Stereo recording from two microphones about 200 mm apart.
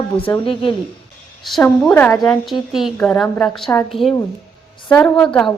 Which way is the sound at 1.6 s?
10° left (ahead or behind).